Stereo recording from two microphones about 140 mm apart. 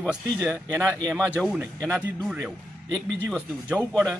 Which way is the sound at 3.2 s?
15° right (ahead or behind).